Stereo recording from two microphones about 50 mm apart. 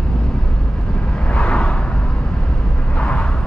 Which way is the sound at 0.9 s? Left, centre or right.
Left.